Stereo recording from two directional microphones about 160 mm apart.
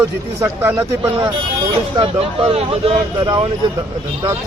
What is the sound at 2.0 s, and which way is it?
Speech, 40° right (ahead or behind).